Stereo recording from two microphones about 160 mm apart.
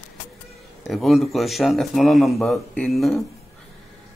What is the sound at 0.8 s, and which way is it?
A man's voice, centre (ahead or behind).